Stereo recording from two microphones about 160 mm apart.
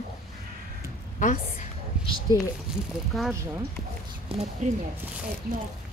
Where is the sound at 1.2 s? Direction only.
50° left (ahead or behind).